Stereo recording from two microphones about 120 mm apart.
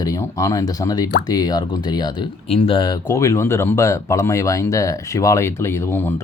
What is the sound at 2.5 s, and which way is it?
Speech, 50° left (ahead or behind).